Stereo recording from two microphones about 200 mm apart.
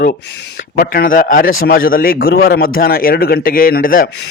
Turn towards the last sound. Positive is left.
turn(degrees=45)  # may be behind; listen again after turning